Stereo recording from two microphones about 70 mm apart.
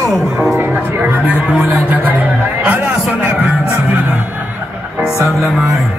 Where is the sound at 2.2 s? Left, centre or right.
Right.